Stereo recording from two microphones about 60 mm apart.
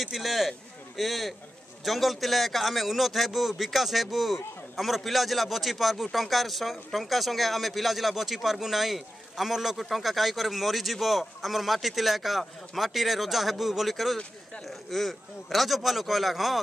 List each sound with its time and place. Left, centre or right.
0.0 s a man's voice: centre